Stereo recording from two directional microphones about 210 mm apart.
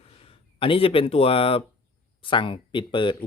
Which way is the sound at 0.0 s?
25° left (ahead or behind).